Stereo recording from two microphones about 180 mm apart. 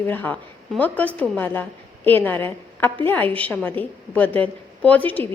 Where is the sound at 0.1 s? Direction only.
10° left (ahead or behind).